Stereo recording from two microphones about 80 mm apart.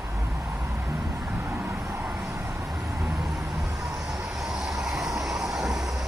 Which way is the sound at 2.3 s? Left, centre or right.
Right.